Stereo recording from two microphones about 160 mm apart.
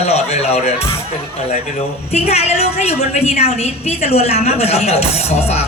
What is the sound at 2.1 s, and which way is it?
Speech, 40° left (ahead or behind).